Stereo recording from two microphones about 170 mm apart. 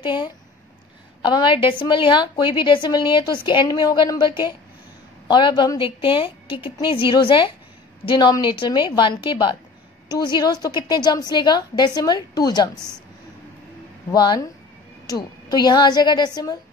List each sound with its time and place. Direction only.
0.0 s a woman's voice: 25° left (ahead or behind)
14.1 s a woman's voice: 25° left (ahead or behind)